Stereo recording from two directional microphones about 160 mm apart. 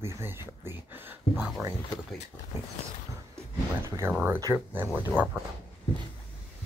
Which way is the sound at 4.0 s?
10° right (ahead or behind).